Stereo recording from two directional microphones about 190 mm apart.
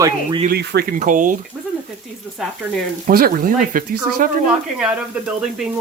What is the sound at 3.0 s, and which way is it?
Speech, 50° right (ahead or behind).